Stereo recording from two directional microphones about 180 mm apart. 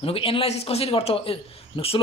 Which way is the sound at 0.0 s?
30° left (ahead or behind).